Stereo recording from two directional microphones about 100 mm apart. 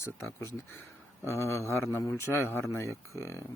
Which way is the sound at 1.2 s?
25° left (ahead or behind).